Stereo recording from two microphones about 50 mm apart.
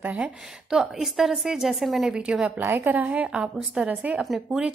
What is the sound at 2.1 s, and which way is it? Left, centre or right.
Speech, centre.